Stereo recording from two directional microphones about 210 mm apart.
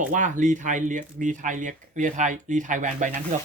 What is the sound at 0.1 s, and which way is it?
Speech, 35° right (ahead or behind).